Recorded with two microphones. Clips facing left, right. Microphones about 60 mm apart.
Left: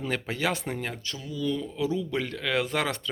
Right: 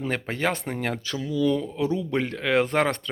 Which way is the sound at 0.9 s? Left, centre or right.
Right.